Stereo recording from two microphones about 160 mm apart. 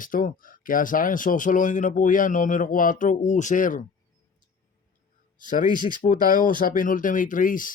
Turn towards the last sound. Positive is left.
turn(degrees=55)  # may be behind; listen again after turning